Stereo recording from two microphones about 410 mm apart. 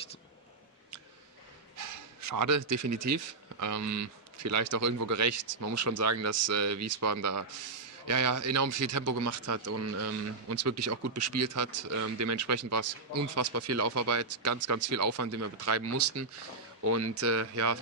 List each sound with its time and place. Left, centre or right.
1.8 s speech: right